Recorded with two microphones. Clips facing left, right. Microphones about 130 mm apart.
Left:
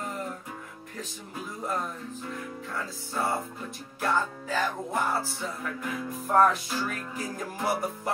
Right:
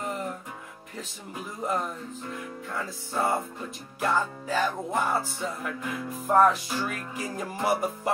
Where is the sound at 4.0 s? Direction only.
Centre (ahead or behind).